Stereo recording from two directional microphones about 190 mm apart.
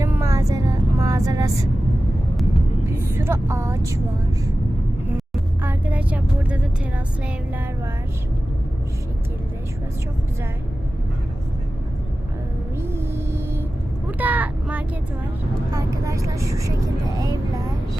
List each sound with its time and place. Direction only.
0.0 s vehicle: 15° right (ahead or behind)
2.9 s vehicle: 15° right (ahead or behind)
5.1 s vehicle: 5° right (ahead or behind)
12.8 s music: 10° right (ahead or behind)
14.1 s vehicle: 10° right (ahead or behind)
15.7 s speech: 15° right (ahead or behind)